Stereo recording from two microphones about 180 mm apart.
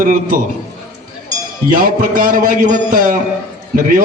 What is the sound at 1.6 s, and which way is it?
A man's voice, 50° right (ahead or behind).